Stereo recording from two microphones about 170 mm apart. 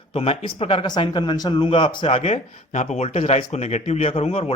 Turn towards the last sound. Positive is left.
turn(degrees=35)  # may be behind; listen again after turning